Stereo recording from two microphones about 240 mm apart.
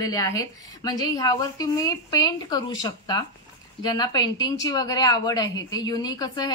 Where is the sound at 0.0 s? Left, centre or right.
Centre.